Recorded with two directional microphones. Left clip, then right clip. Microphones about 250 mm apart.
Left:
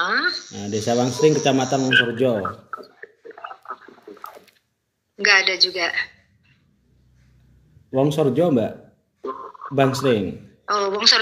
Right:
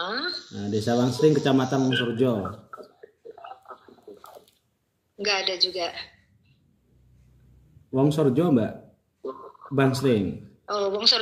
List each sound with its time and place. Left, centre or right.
0.0 s cricket: left
0.7 s a man's voice: centre
1.8 s a man's voice: left
2.1 s a man's voice: centre
2.4 s a sound: left
5.1 s a man's voice: left
7.9 s a man's voice: centre
9.2 s a sound: left
9.8 s a man's voice: centre
10.6 s a woman's voice: left